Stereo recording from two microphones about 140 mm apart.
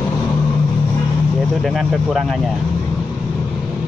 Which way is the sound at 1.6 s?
Centre (ahead or behind).